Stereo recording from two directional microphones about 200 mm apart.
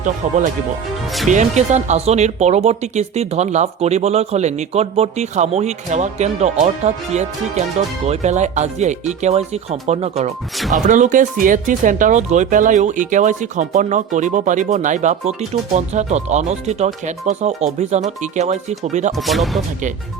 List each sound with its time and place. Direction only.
1.3 s speech: 35° right (ahead or behind)
10.6 s speech: centre (ahead or behind)
10.8 s speech: 40° right (ahead or behind)
19.1 s speech: centre (ahead or behind)